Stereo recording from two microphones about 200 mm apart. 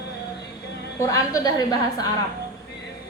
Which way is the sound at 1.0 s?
15° left (ahead or behind).